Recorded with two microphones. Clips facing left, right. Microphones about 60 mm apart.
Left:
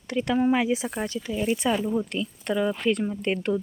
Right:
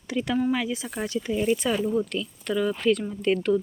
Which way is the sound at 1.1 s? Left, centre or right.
Centre.